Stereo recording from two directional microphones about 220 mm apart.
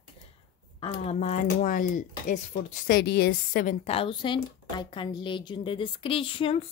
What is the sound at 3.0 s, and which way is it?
Speech, 50° left (ahead or behind).